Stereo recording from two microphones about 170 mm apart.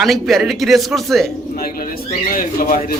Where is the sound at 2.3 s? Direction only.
55° left (ahead or behind).